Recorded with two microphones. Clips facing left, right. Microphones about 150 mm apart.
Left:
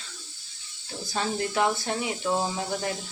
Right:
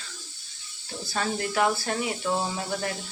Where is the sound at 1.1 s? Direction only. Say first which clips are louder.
Even; 20° left (ahead or behind).